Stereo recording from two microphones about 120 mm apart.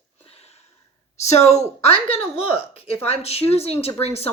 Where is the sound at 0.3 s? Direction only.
60° left (ahead or behind).